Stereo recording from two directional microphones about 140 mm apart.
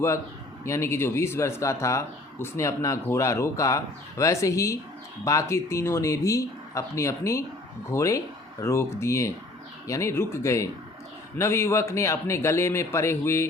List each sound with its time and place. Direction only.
0.6 s speech: 20° left (ahead or behind)